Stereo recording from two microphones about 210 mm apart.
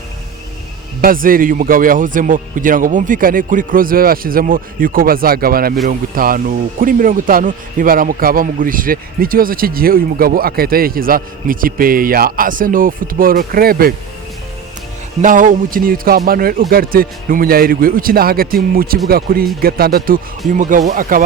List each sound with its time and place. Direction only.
1.0 s a man's voice: 40° right (ahead or behind)
15.2 s a man's voice: 40° right (ahead or behind)